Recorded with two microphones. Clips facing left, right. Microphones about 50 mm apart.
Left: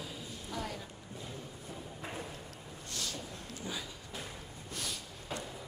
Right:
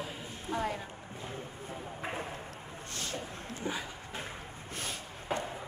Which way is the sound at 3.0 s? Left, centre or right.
Right.